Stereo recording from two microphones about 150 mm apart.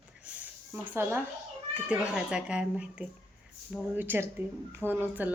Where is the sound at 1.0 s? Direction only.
15° right (ahead or behind).